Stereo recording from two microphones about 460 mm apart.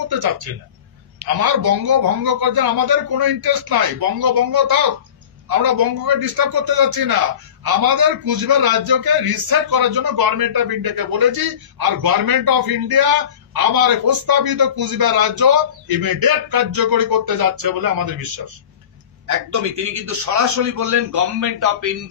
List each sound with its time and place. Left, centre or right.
1.4 s a man's voice: right
19.2 s a man's voice: right